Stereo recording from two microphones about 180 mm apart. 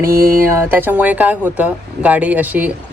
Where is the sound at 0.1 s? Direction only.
55° right (ahead or behind).